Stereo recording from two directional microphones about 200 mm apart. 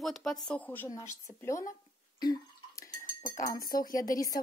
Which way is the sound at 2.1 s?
20° left (ahead or behind).